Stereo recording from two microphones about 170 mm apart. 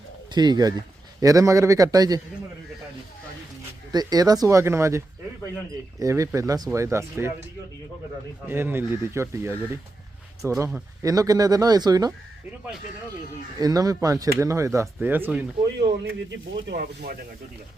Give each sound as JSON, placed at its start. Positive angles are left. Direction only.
{"t": 0.3, "sound": "a man's voice", "side_deg": -25}
{"t": 3.9, "sound": "a man's voice", "side_deg": -20}
{"t": 8.4, "sound": "a man's voice", "side_deg": -15}
{"t": 13.6, "sound": "speech", "side_deg": -20}
{"t": 15.6, "sound": "speech", "side_deg": -70}